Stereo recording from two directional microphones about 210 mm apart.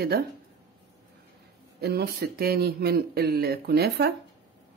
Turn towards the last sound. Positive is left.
turn(degrees=-50)  # may be behind; listen again after turning